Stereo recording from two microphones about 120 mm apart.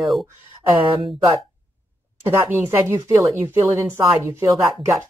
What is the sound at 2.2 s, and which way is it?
Speech, 20° right (ahead or behind).